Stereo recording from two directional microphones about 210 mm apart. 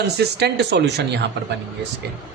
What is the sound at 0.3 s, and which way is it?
Speech, 50° right (ahead or behind).